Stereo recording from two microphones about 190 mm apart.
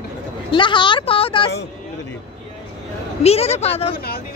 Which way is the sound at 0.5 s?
25° left (ahead or behind).